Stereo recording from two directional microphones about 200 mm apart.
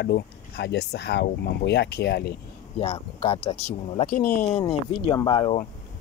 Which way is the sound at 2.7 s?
30° left (ahead or behind).